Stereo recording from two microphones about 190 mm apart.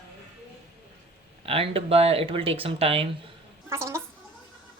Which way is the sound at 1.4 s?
30° right (ahead or behind).